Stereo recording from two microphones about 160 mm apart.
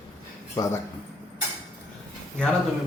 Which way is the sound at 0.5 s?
20° left (ahead or behind).